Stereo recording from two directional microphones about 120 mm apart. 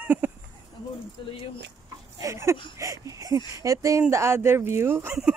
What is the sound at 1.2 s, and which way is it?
Speech, 45° left (ahead or behind).